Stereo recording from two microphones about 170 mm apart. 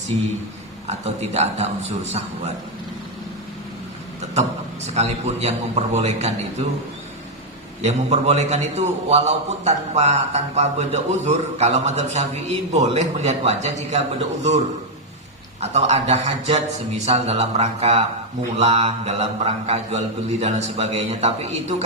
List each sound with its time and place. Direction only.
0.9 s a man's voice: 40° right (ahead or behind)
4.9 s a man's voice: 40° right (ahead or behind)
7.9 s a man's voice: 40° right (ahead or behind)
15.6 s a man's voice: 40° right (ahead or behind)